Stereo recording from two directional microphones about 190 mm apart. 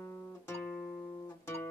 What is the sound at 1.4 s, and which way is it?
Music, 15° left (ahead or behind).